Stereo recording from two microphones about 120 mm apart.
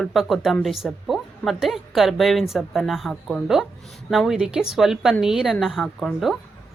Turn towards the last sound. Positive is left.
turn(degrees=0)  # may be behind; listen again after turning